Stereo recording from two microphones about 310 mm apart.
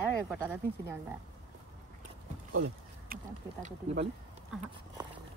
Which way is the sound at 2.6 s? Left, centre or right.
Right.